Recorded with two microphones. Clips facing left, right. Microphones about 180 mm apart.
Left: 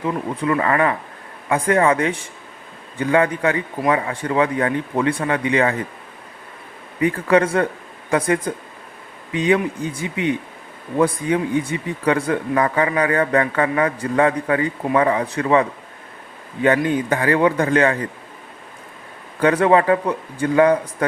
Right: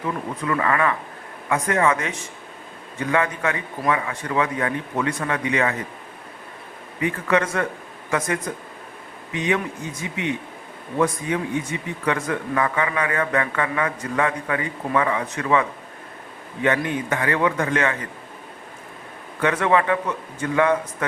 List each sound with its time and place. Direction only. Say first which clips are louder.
0.0 s speech: left 4 dB; 30° left (ahead or behind)
7.0 s speech: left 5 dB; 35° left (ahead or behind)
16.6 s speech: left 5 dB; 35° left (ahead or behind)
19.4 s speech: left 5 dB; 35° left (ahead or behind)